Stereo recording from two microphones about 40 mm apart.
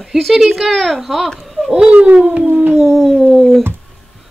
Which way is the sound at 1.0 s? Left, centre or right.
Centre.